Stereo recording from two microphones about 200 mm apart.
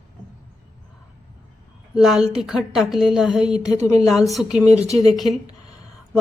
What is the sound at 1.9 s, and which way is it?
A woman's voice, centre (ahead or behind).